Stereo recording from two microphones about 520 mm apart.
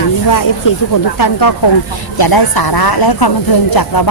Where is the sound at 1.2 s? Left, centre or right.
Left.